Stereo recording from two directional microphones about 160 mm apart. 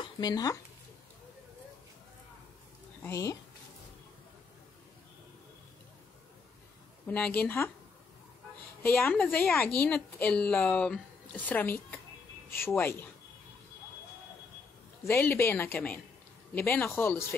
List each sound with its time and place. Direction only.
0.2 s speech: 25° left (ahead or behind)
3.0 s speech: 20° left (ahead or behind)
7.1 s a woman's voice: 10° left (ahead or behind)
8.8 s a woman's voice: 10° left (ahead or behind)
15.0 s a woman's voice: 15° left (ahead or behind)